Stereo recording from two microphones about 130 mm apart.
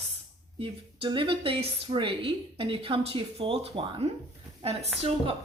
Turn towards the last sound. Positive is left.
turn(degrees=-50)  # may be behind; listen again after turning